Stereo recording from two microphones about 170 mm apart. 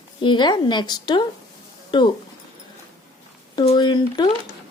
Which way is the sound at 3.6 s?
25° left (ahead or behind).